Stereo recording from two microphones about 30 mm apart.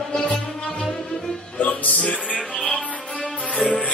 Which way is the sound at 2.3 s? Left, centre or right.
Left.